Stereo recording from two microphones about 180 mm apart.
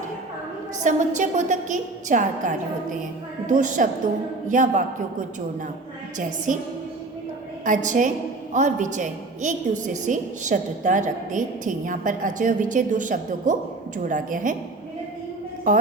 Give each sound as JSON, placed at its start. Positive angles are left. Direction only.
{"t": 0.8, "sound": "a woman's voice", "side_deg": -45}
{"t": 6.1, "sound": "a woman's voice", "side_deg": -45}
{"t": 7.6, "sound": "a woman's voice", "side_deg": -45}
{"t": 15.7, "sound": "a woman's voice", "side_deg": -45}